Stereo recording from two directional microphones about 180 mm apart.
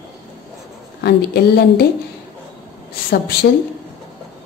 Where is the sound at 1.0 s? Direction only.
65° left (ahead or behind).